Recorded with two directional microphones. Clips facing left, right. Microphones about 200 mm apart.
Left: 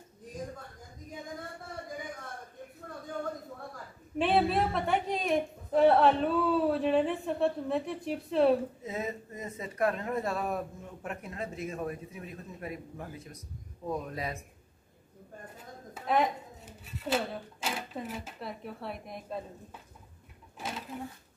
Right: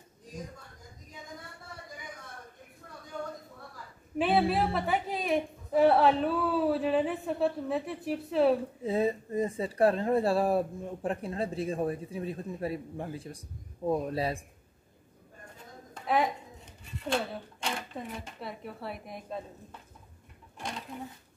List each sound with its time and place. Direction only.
1.1 s a sound: 50° left (ahead or behind)
4.2 s a woman's voice: centre (ahead or behind)
8.8 s speech: 30° right (ahead or behind)
15.5 s speech: centre (ahead or behind)
20.5 s dishes: 5° left (ahead or behind)